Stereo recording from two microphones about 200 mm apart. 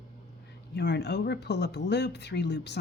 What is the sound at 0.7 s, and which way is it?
Speech, 60° left (ahead or behind).